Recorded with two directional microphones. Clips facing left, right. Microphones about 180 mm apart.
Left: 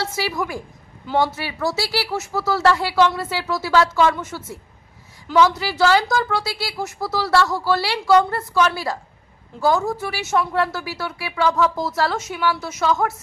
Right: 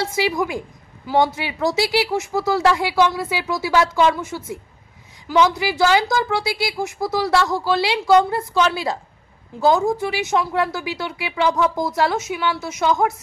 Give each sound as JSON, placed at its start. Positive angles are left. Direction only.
{"t": 0.0, "sound": "a woman's voice", "side_deg": -15}